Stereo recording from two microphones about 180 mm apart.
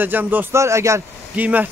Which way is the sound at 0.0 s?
10° right (ahead or behind).